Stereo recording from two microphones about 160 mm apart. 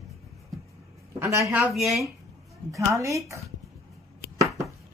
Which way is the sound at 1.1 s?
20° right (ahead or behind).